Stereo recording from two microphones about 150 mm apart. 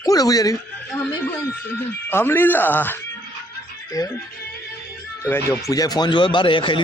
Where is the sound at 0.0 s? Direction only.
25° left (ahead or behind).